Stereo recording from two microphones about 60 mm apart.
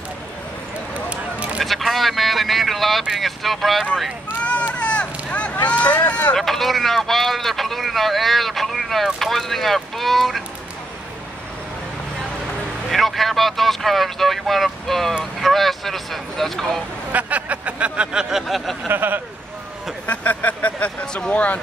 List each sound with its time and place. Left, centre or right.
1.1 s a sound: centre
1.6 s speech: centre
4.4 s a sound: left
5.6 s vehicle: left
6.3 s speech: centre
12.9 s speech: centre
17.1 s speech: right
18.3 s speech: centre
18.9 s speech: right
20.1 s speech: left